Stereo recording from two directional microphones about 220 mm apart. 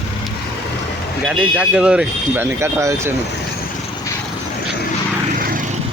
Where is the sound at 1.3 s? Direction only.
5° right (ahead or behind).